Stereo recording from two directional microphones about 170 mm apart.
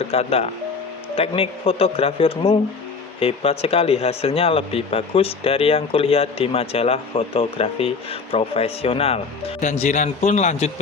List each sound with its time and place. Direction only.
0.0 s speech: 35° left (ahead or behind)